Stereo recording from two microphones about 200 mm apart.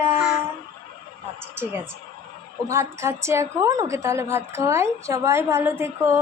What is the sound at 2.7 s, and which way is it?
A woman's voice, 15° right (ahead or behind).